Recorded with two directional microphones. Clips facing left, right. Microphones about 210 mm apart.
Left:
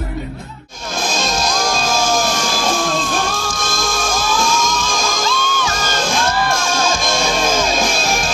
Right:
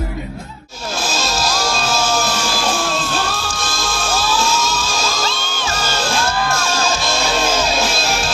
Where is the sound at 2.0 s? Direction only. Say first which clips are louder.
Left 3 dB; 10° left (ahead or behind).